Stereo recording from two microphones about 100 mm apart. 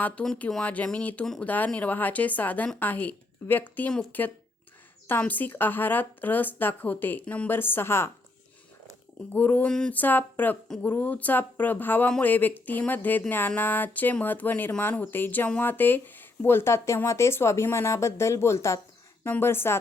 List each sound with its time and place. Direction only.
0.0 s a woman's voice: 15° left (ahead or behind)
9.3 s a woman's voice: 20° left (ahead or behind)